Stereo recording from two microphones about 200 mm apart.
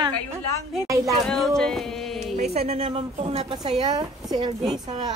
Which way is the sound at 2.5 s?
30° right (ahead or behind).